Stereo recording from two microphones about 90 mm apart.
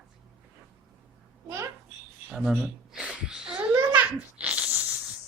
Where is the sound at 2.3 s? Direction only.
5° right (ahead or behind).